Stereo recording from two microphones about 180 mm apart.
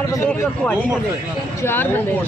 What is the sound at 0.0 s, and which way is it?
Speech, 15° left (ahead or behind).